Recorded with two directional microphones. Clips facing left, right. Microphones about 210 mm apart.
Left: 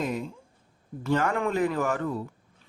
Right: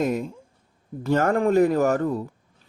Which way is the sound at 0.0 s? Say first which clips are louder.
Right 6 dB; 45° right (ahead or behind).